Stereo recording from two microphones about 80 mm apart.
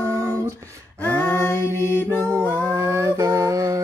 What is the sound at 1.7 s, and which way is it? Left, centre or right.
Mantra, right.